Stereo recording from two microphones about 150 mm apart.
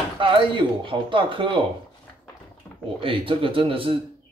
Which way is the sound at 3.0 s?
35° right (ahead or behind).